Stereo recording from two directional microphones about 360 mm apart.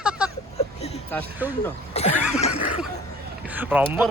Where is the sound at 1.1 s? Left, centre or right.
Centre.